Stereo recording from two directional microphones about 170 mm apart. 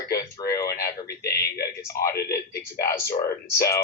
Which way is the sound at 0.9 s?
65° left (ahead or behind).